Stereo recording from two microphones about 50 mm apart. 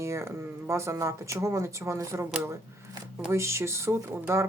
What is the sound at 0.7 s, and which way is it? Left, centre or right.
Speech, right.